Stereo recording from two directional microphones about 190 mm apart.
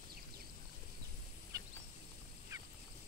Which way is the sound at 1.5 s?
20° right (ahead or behind).